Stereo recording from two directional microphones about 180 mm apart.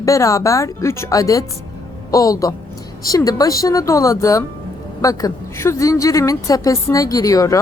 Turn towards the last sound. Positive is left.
turn(degrees=20)  # may be behind; listen again after turning